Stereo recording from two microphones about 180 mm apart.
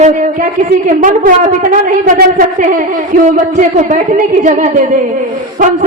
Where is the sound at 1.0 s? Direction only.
50° right (ahead or behind).